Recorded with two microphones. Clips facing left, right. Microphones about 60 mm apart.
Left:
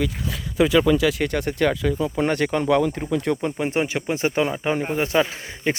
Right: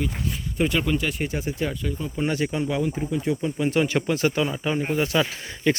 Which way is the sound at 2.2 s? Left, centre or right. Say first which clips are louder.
Left 3 dB; left.